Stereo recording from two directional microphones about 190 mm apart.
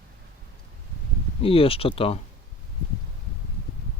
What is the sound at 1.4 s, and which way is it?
Speech, 30° left (ahead or behind).